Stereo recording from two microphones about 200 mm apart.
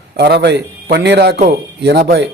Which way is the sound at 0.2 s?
55° right (ahead or behind).